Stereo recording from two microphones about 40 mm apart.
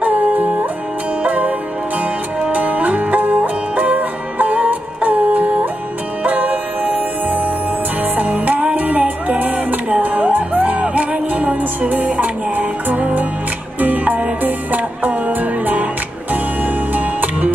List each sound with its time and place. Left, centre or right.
0.0 s music: right
8.0 s music: right
10.8 s music: right
11.9 s music: right